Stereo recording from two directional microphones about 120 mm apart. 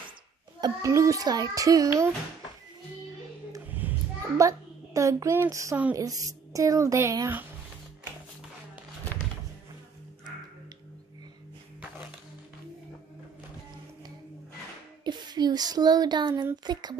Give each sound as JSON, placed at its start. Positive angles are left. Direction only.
{"t": 0.6, "sound": "a child's voice", "side_deg": -30}
{"t": 3.6, "sound": "a sound", "side_deg": -15}
{"t": 4.4, "sound": "a child's voice", "side_deg": -25}
{"t": 15.0, "sound": "a child's voice", "side_deg": -35}